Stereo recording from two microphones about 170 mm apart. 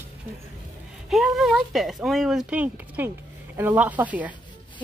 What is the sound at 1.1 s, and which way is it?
Speech, centre (ahead or behind).